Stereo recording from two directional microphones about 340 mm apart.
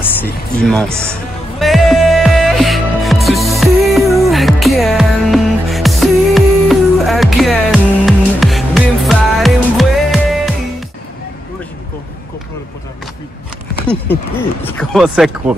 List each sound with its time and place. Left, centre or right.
0.0 s speech: centre
1.6 s music: centre
13.8 s speech: centre